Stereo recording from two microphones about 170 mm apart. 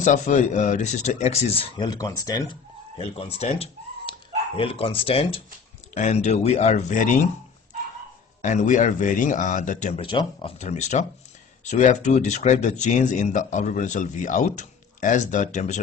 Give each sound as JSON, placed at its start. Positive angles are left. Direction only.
{"t": 0.0, "sound": "speech", "side_deg": 45}
{"t": 1.9, "sound": "speech", "side_deg": 20}
{"t": 3.0, "sound": "speech", "side_deg": 35}
{"t": 8.4, "sound": "speech", "side_deg": 45}
{"t": 10.0, "sound": "speech", "side_deg": 30}
{"t": 10.6, "sound": "speech", "side_deg": 40}